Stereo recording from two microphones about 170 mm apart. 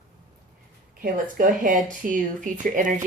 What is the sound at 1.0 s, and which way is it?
A woman's voice, 55° right (ahead or behind).